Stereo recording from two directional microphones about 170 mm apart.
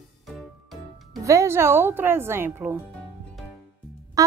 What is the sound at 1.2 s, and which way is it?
A woman's voice, 20° right (ahead or behind).